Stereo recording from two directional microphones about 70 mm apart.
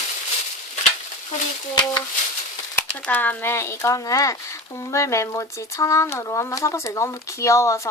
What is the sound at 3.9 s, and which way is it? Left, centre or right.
Speech, left.